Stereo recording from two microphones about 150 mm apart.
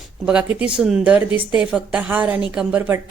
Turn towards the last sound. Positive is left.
turn(degrees=-15)  # may be behind; listen again after turning